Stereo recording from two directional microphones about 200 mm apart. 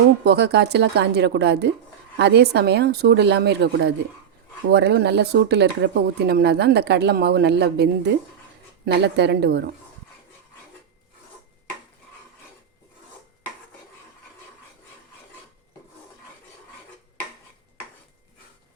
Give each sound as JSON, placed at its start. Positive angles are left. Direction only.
{"t": 0.3, "sound": "speech", "side_deg": -55}